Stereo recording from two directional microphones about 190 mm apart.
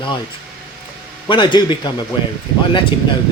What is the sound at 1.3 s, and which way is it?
Speech, 25° left (ahead or behind).